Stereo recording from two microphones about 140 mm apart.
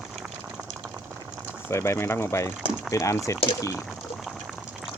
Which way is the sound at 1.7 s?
20° left (ahead or behind).